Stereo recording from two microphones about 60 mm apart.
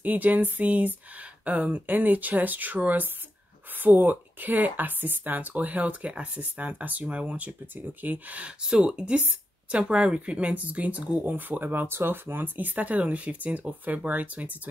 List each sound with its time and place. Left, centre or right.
0.0 s speech: right
8.6 s speech: centre